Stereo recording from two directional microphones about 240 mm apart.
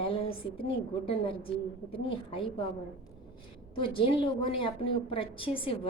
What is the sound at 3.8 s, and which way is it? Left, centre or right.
A woman's voice, left.